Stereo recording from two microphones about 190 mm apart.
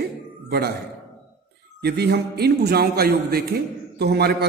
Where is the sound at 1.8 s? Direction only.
55° right (ahead or behind).